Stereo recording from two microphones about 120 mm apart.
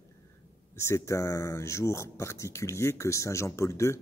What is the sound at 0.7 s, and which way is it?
Speech, 25° left (ahead or behind).